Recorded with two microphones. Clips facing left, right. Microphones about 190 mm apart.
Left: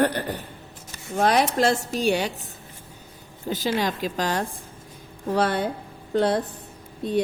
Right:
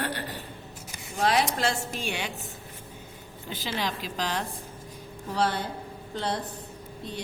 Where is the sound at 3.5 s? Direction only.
40° left (ahead or behind).